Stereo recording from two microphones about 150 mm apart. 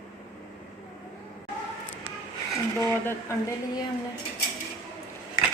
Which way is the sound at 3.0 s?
15° left (ahead or behind).